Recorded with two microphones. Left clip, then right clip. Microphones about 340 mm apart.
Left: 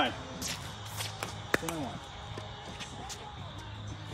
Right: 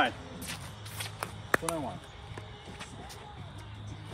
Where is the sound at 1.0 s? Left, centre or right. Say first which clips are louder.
Right 1 dB; centre.